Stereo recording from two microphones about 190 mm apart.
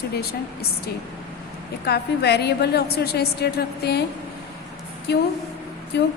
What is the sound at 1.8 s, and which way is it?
A woman's voice, 60° left (ahead or behind).